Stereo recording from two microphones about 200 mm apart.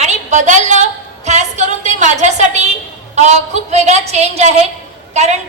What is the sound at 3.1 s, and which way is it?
A woman's voice, 35° right (ahead or behind).